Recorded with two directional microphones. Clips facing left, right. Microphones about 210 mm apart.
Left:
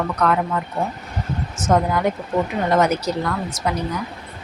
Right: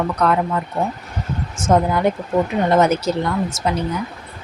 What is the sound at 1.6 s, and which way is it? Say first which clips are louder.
Speech: right 2 dB; 30° right (ahead or behind).